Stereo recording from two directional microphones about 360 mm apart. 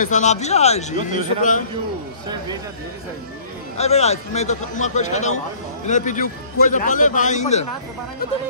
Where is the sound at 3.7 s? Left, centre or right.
Centre.